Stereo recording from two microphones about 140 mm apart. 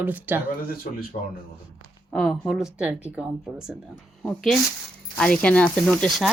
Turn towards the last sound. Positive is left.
turn(degrees=0)  # may be behind; listen again after turning